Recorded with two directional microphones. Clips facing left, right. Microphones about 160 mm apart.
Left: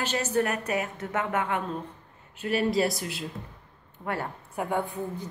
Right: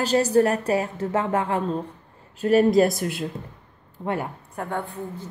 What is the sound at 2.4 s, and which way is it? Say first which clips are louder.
Speech: right 8 dB; 45° right (ahead or behind).